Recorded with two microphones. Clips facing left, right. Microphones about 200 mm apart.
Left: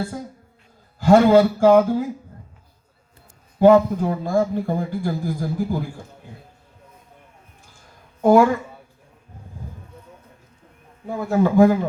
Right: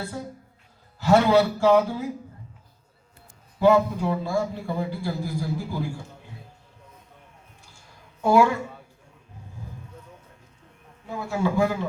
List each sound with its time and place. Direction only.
0.9 s a man's voice: 50° left (ahead or behind)
3.6 s a man's voice: 50° left (ahead or behind)
8.2 s a man's voice: 50° left (ahead or behind)
11.0 s a man's voice: 50° left (ahead or behind)